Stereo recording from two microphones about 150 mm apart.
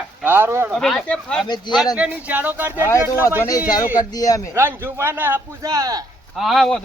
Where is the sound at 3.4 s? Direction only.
25° left (ahead or behind).